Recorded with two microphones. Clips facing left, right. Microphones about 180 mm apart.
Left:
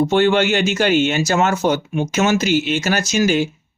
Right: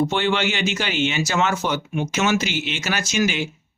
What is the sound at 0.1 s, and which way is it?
Speech, 45° left (ahead or behind).